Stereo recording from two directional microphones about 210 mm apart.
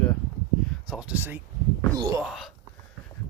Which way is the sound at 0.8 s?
5° right (ahead or behind).